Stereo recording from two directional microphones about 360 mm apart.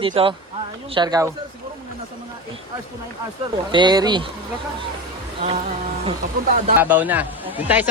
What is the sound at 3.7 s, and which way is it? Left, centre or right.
Speech, centre.